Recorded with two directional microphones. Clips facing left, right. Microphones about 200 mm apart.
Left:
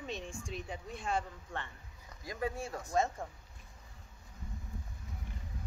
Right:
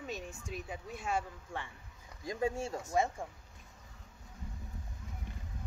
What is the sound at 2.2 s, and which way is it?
Speech, 25° right (ahead or behind).